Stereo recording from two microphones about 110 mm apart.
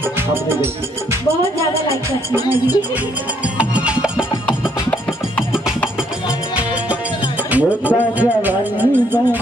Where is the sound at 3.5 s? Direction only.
10° right (ahead or behind).